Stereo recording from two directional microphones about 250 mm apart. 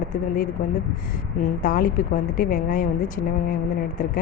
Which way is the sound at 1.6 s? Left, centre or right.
Left.